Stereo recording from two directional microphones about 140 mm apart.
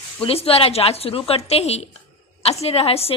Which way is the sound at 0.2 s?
45° left (ahead or behind).